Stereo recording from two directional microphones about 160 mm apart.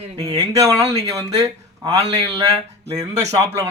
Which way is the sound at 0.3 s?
20° right (ahead or behind).